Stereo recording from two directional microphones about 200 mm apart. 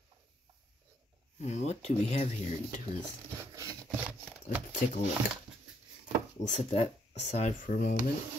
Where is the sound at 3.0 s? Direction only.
15° right (ahead or behind).